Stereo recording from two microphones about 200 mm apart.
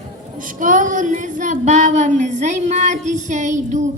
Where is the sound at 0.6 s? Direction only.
40° right (ahead or behind).